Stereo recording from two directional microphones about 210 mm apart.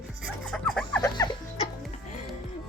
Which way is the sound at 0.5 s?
5° left (ahead or behind).